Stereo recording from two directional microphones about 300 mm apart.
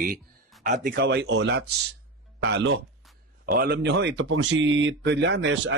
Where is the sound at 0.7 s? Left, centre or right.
Right.